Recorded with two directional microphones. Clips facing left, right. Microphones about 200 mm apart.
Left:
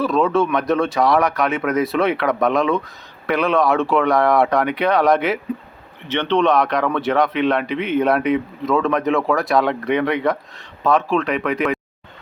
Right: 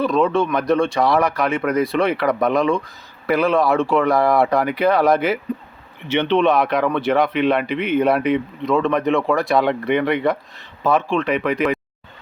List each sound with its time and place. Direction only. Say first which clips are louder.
0.0 s speech: even; centre (ahead or behind)